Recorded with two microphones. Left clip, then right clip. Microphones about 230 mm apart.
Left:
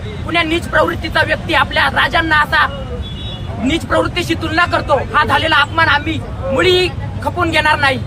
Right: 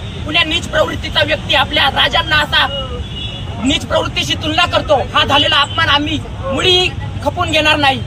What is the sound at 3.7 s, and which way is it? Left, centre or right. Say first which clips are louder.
Speech: even; centre.